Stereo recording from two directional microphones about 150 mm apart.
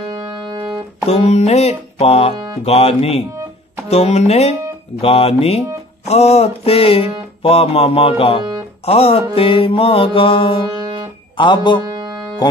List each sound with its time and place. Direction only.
0.0 s music: 30° right (ahead or behind)
1.0 s music: 45° left (ahead or behind)
10.7 s music: 30° right (ahead or behind)
11.3 s music: 30° left (ahead or behind)
11.8 s music: 30° right (ahead or behind)